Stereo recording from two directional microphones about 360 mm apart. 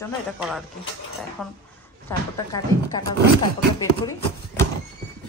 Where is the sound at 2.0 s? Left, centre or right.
Centre.